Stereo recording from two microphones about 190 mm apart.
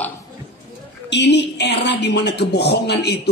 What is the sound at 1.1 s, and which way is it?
A man's voice, 65° left (ahead or behind).